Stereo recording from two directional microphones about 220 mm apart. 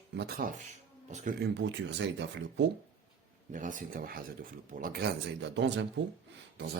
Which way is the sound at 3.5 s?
35° right (ahead or behind).